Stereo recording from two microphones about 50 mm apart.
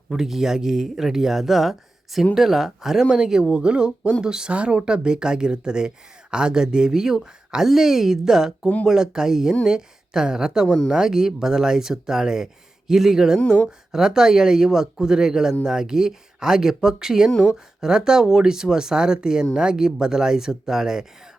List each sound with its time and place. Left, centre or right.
0.1 s speech: centre
8.6 s speech: left
8.9 s speech: centre